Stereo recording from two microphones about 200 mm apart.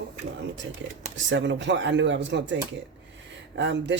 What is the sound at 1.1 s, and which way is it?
Speech, 65° right (ahead or behind).